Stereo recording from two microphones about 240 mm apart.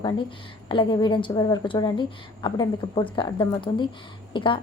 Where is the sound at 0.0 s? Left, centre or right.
Centre.